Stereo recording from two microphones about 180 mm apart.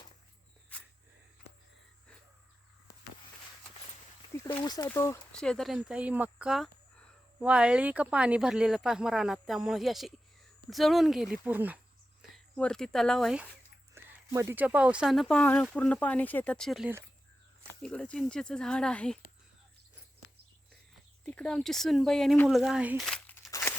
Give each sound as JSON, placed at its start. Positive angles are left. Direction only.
{"t": 4.3, "sound": "a sound", "side_deg": 15}
{"t": 4.9, "sound": "speech", "side_deg": 15}
{"t": 5.3, "sound": "speech", "side_deg": 5}
{"t": 12.3, "sound": "speech", "side_deg": 5}
{"t": 14.0, "sound": "a sound", "side_deg": -15}
{"t": 14.3, "sound": "speech", "side_deg": -10}
{"t": 21.2, "sound": "speech", "side_deg": 5}
{"t": 23.0, "sound": "crumpling", "side_deg": 5}